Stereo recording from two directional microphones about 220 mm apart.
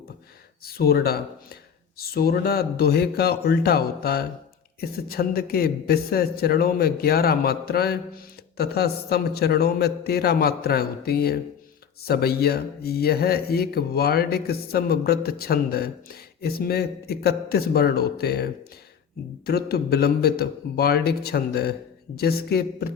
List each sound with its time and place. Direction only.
0.6 s speech: 45° left (ahead or behind)